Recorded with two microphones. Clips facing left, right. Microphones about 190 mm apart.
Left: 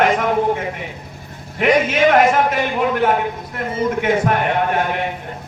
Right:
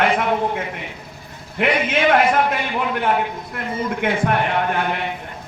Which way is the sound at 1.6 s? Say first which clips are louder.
Left 4 dB; 40° left (ahead or behind).